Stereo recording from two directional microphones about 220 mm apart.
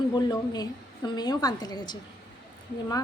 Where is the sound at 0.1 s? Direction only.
20° left (ahead or behind).